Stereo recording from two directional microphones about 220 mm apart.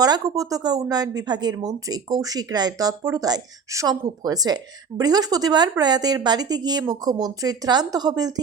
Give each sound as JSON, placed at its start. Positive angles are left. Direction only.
{"t": 0.0, "sound": "speech", "side_deg": -15}